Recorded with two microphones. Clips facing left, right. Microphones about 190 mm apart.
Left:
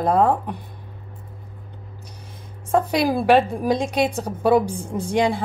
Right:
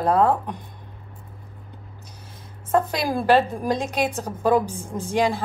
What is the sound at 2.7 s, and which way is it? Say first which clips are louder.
A woman's voice: left 3 dB; 10° left (ahead or behind).